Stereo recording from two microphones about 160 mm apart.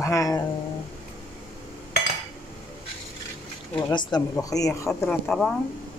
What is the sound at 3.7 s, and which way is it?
A woman's voice, 25° left (ahead or behind).